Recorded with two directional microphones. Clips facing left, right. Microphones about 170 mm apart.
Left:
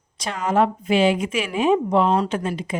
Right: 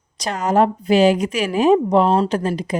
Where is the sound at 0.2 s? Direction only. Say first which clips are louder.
Right 3 dB; 40° right (ahead or behind).